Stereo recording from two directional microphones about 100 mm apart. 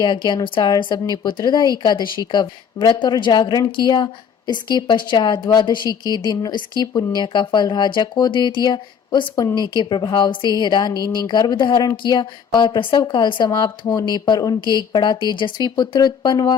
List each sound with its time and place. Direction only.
0.0 s speech: 50° left (ahead or behind)